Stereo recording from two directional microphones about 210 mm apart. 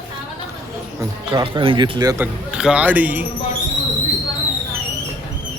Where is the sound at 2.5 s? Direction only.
5° right (ahead or behind).